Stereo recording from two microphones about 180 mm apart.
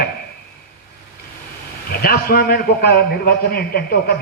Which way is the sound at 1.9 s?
55° left (ahead or behind).